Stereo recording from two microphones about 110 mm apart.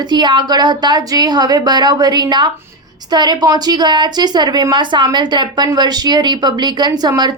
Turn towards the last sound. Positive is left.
turn(degrees=-40)  # may be behind; listen again after turning